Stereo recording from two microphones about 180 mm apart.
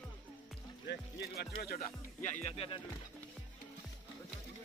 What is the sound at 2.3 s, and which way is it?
Speech, 35° left (ahead or behind).